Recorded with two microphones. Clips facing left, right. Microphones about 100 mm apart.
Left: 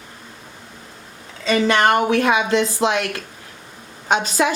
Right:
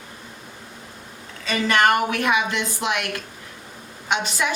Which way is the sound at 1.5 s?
25° left (ahead or behind).